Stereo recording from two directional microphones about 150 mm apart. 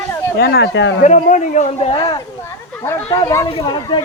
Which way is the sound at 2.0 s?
30° left (ahead or behind).